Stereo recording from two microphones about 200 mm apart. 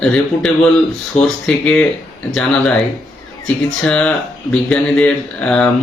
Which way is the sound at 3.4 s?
5° left (ahead or behind).